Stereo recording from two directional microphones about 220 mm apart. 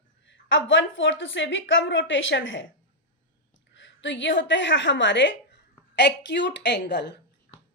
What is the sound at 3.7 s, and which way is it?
A woman's voice, 55° left (ahead or behind).